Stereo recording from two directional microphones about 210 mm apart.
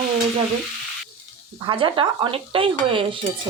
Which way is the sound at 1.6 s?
25° right (ahead or behind).